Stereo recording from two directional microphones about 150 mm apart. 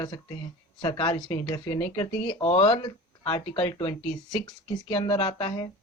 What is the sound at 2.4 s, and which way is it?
Speech, 40° left (ahead or behind).